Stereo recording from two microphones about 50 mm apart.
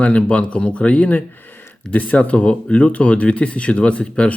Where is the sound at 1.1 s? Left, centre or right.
Left.